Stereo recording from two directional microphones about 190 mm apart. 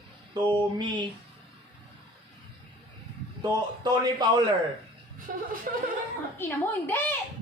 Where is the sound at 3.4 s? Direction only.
20° right (ahead or behind).